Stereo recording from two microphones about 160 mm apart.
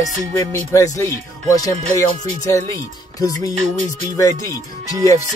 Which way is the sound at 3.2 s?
20° left (ahead or behind).